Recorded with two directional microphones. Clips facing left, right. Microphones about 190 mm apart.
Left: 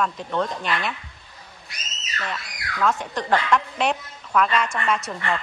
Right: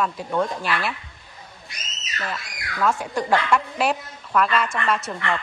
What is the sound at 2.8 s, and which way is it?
Speech, 10° right (ahead or behind).